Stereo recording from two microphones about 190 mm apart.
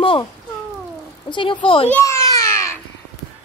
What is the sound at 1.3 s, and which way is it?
Speech, 25° left (ahead or behind).